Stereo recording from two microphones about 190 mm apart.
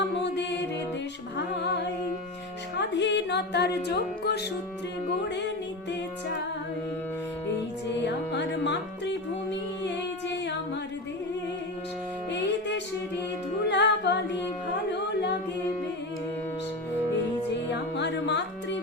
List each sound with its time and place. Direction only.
0.0 s music: 65° left (ahead or behind)
2.7 s music: 65° left (ahead or behind)
7.9 s music: 65° left (ahead or behind)
12.3 s music: 65° left (ahead or behind)
17.7 s music: 65° left (ahead or behind)